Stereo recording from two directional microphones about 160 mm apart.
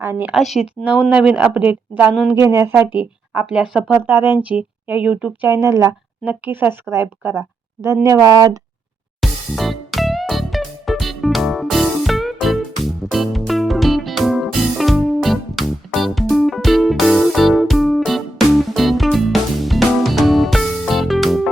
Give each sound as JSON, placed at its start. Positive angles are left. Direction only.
{"t": 0.0, "sound": "speech", "side_deg": -15}
{"t": 0.3, "sound": "speech", "side_deg": 0}
{"t": 9.2, "sound": "music", "side_deg": 0}